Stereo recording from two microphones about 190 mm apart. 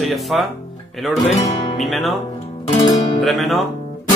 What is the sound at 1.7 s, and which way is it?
Speech, centre (ahead or behind).